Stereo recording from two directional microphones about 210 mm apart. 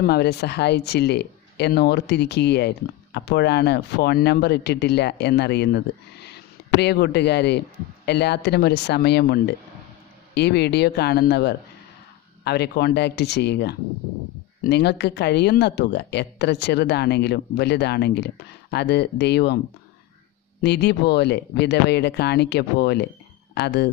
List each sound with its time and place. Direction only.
0.0 s speech: 50° left (ahead or behind)
20.6 s speech: 55° left (ahead or behind)